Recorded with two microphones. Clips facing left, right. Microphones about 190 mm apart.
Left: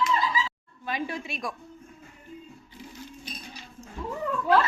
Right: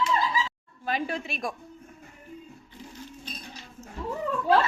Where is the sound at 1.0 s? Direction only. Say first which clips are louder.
Right 1 dB; 50° right (ahead or behind).